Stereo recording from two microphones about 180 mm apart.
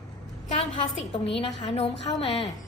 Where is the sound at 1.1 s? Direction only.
30° left (ahead or behind).